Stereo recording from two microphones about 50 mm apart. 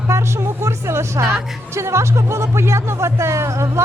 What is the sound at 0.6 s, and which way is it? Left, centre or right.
A woman's voice, right.